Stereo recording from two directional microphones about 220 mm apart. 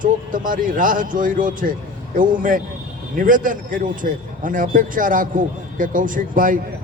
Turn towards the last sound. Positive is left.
turn(degrees=-40)  # may be behind; listen again after turning